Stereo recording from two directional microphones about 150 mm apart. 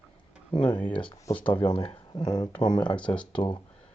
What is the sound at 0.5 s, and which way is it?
Speech, 30° left (ahead or behind).